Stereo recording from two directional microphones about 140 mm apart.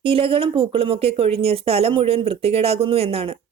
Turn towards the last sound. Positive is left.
turn(degrees=-45)  # may be behind; listen again after turning